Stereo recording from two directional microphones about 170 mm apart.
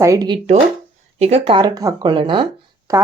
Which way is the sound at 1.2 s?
35° right (ahead or behind).